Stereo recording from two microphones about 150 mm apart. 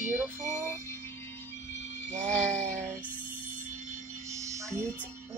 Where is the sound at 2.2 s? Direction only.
5° left (ahead or behind).